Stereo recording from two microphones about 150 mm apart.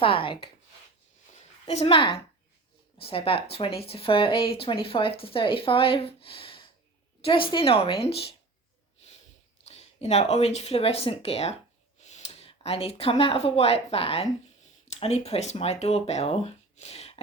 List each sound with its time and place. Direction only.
0.0 s speech: 35° left (ahead or behind)
1.3 s a sound: 45° left (ahead or behind)
3.0 s speech: 40° left (ahead or behind)
9.6 s speech: 45° left (ahead or behind)